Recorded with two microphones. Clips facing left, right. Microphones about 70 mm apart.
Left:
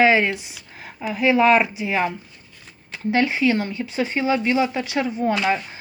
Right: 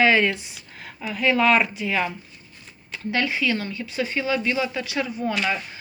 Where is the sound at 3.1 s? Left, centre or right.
Left.